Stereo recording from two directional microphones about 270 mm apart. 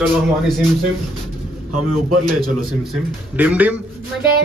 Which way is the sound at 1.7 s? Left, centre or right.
Right.